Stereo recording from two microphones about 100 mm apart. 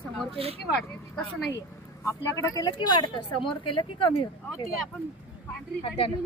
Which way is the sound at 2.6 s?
45° left (ahead or behind).